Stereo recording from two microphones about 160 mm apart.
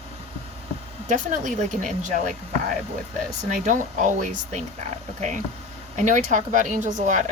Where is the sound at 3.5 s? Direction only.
50° right (ahead or behind).